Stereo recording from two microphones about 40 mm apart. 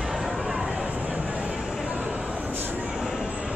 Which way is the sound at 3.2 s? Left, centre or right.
Right.